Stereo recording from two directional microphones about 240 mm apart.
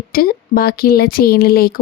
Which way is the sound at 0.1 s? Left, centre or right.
Left.